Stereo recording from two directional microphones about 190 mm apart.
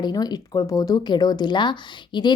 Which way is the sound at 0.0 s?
20° left (ahead or behind).